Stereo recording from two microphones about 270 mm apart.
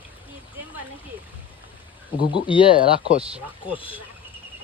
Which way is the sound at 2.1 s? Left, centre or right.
Left.